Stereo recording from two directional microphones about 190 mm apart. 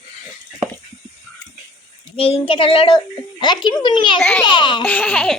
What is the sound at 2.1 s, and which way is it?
A child's voice, 30° left (ahead or behind).